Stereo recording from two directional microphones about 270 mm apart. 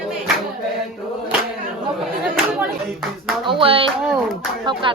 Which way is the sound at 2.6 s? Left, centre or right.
Centre.